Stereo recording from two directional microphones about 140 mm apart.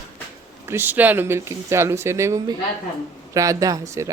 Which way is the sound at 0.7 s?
15° right (ahead or behind).